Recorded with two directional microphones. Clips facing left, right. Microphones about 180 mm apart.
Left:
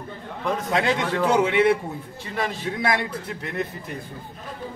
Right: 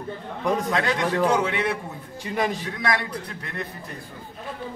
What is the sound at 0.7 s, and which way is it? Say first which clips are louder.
A man's voice: left 1 dB; 25° left (ahead or behind).